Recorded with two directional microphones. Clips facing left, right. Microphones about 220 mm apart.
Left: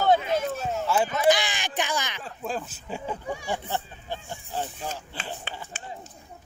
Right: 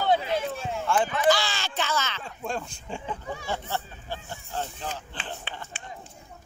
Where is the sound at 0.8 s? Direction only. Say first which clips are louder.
Even; 5° left (ahead or behind).